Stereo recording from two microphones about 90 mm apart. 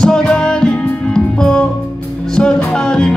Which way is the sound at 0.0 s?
10° left (ahead or behind).